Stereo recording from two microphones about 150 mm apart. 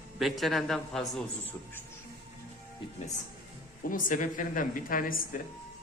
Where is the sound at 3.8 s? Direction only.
65° left (ahead or behind).